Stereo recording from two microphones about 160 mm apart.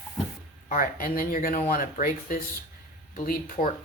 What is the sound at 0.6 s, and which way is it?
Speech, 60° left (ahead or behind).